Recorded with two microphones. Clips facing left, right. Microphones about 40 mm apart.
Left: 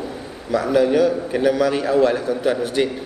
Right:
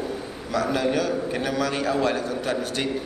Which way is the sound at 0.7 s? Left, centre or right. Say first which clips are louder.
Left 9 dB; centre.